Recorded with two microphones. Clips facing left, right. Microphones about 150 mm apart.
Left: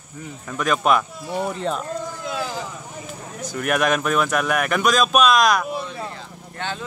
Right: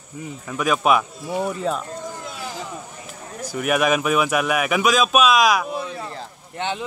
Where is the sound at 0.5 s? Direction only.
5° right (ahead or behind).